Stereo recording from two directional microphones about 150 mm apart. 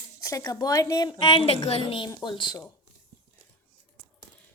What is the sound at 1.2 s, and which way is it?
Speech, 40° left (ahead or behind).